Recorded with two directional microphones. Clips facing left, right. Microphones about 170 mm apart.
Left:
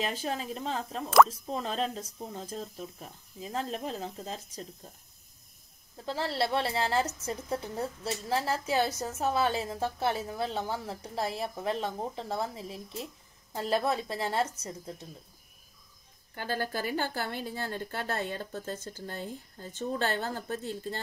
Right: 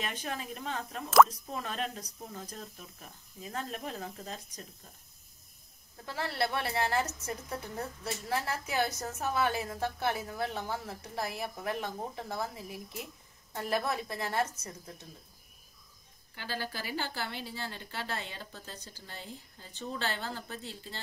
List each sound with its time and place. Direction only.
0.0 s a woman's voice: 30° left (ahead or behind)
6.0 s a woman's voice: 25° left (ahead or behind)
16.3 s a woman's voice: 50° left (ahead or behind)